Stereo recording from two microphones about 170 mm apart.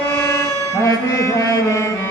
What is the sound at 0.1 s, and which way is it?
Music, 15° left (ahead or behind).